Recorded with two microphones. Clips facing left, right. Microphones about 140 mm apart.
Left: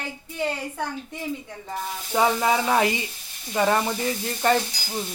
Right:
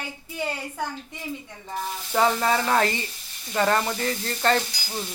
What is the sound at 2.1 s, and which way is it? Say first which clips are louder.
Speech: left 1 dB; 10° left (ahead or behind).